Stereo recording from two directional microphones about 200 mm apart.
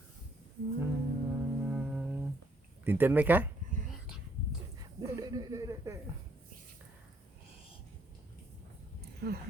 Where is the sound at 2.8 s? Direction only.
10° right (ahead or behind).